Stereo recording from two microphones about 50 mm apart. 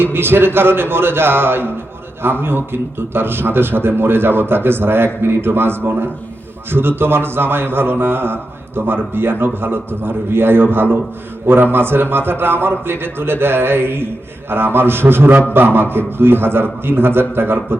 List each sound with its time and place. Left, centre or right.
0.0 s a man's voice: right